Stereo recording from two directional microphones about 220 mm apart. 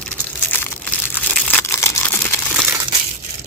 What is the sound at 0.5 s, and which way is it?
Crumpling, 10° left (ahead or behind).